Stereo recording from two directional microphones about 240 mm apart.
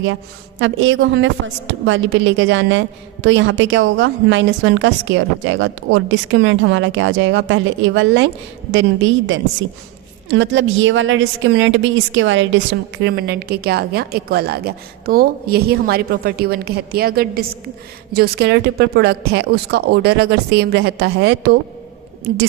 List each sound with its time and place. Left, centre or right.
0.6 s a woman's voice: right